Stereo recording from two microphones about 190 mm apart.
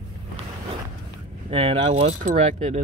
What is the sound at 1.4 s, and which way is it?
Speech, 30° right (ahead or behind).